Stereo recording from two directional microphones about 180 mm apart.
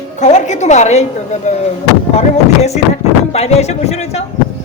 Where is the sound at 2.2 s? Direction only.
35° left (ahead or behind).